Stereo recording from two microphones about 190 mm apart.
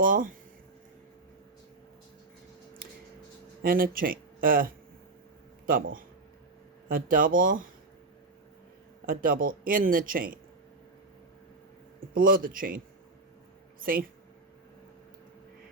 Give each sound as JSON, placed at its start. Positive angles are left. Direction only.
{"t": 0.0, "sound": "speech", "side_deg": -45}
{"t": 3.6, "sound": "speech", "side_deg": -50}
{"t": 9.0, "sound": "speech", "side_deg": -50}
{"t": 11.9, "sound": "speech", "side_deg": -50}